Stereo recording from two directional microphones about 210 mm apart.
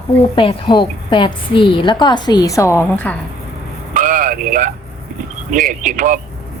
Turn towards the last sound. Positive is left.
turn(degrees=-35)  # may be behind; listen again after turning